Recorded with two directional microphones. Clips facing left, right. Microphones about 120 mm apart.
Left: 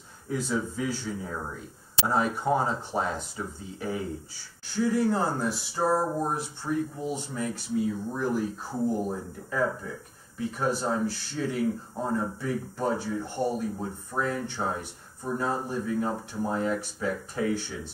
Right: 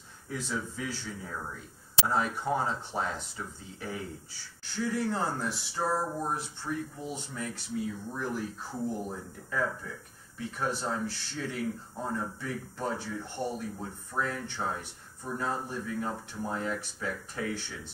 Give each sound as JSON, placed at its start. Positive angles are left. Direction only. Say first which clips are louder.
{"t": 0.3, "sound": "speech", "louder": "left 6 dB", "side_deg": 15}
{"t": 5.8, "sound": "speech", "louder": "left 5 dB", "side_deg": 30}
{"t": 6.2, "sound": "speech", "louder": "left 4 dB", "side_deg": 10}
{"t": 8.7, "sound": "speech", "louder": "left 6 dB", "side_deg": 40}
{"t": 9.1, "sound": "speech", "louder": "left 4 dB", "side_deg": 20}